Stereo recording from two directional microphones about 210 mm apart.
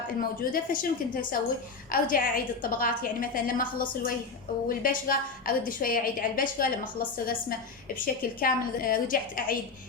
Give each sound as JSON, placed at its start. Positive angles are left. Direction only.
{"t": 0.2, "sound": "a woman's voice", "side_deg": 40}
{"t": 7.9, "sound": "a woman's voice", "side_deg": 45}